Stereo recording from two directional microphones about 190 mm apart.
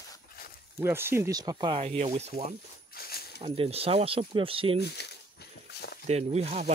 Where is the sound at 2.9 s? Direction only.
55° left (ahead or behind).